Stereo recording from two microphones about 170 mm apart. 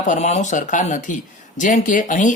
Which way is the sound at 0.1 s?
40° left (ahead or behind).